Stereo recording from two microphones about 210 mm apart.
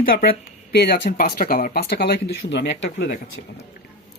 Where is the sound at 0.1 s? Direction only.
45° left (ahead or behind).